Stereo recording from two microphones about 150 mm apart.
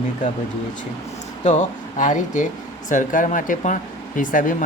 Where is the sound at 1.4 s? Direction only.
55° left (ahead or behind).